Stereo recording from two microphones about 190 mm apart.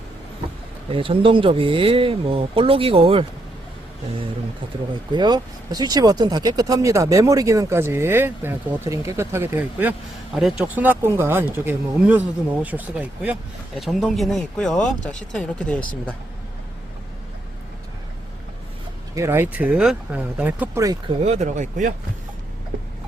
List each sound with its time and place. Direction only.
0.9 s speech: 30° right (ahead or behind)
5.1 s speech: 20° right (ahead or behind); by 15.8 s 5° left (ahead or behind)
19.1 s speech: 15° right (ahead or behind)
20.8 s speech: 20° right (ahead or behind)
21.2 s speech: 35° right (ahead or behind)